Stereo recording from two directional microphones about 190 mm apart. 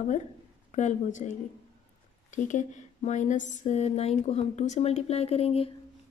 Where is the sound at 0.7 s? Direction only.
40° left (ahead or behind).